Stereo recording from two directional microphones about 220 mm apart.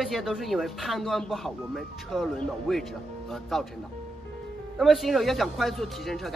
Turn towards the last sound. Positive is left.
turn(degrees=0)  # may be behind; listen again after turning